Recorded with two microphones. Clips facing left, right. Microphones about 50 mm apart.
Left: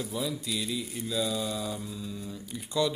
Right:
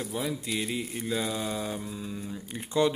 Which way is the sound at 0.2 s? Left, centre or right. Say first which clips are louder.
Right 2 dB; right.